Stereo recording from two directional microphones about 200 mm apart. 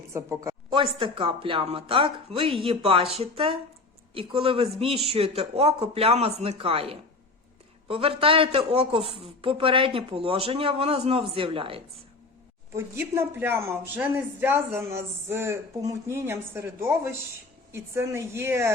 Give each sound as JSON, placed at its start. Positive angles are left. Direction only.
{"t": 0.1, "sound": "a woman's voice", "side_deg": -15}
{"t": 0.9, "sound": "speech", "side_deg": -25}
{"t": 12.7, "sound": "a woman's voice", "side_deg": -15}